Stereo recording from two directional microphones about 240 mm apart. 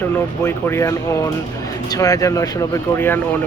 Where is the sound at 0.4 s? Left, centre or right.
Centre.